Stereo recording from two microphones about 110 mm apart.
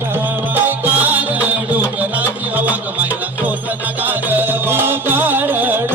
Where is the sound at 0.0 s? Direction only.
20° right (ahead or behind).